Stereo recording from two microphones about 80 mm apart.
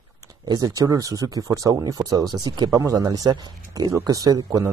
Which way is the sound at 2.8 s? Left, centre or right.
Right.